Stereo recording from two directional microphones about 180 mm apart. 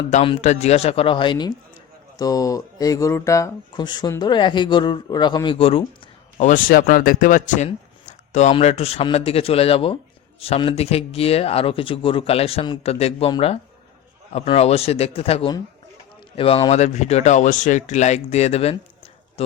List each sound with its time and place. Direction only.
0.1 s speech: 40° left (ahead or behind)
6.3 s speech: 50° left (ahead or behind)